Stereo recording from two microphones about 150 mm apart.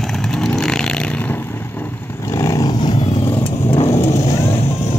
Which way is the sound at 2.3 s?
20° left (ahead or behind).